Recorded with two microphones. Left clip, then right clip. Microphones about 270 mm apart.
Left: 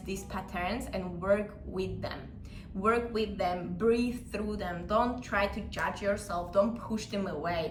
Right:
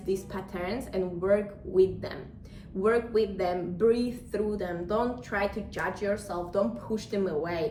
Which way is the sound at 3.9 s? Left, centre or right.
Left.